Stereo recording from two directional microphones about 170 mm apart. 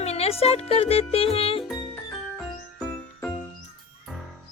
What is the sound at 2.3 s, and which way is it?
Music, 5° left (ahead or behind).